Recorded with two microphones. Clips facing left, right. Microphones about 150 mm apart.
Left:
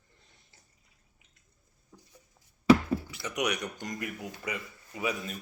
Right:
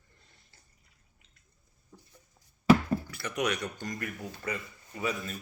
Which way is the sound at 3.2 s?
15° left (ahead or behind).